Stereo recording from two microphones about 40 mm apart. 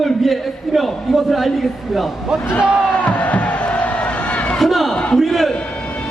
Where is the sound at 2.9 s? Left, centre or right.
Left.